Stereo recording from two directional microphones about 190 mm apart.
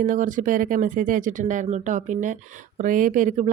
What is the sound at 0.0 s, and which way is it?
Speech, 45° right (ahead or behind).